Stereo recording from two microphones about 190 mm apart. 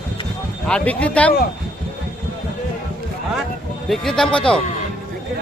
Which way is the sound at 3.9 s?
Centre (ahead or behind).